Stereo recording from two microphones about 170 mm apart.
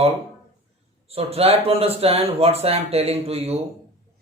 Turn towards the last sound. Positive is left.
turn(degrees=-35)  # may be behind; listen again after turning